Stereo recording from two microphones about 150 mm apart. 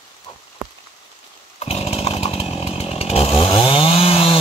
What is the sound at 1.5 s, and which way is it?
Chainsaw, 40° left (ahead or behind).